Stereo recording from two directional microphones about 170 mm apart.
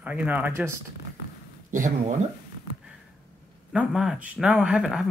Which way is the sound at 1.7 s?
45° right (ahead or behind).